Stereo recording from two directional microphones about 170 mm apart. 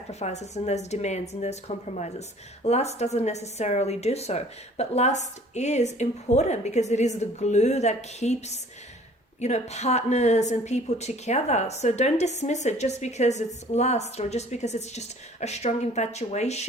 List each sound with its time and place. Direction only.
0.1 s speech: 40° left (ahead or behind)